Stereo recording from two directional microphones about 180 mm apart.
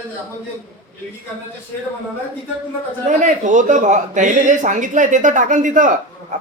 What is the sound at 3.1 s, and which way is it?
Speech, 45° right (ahead or behind).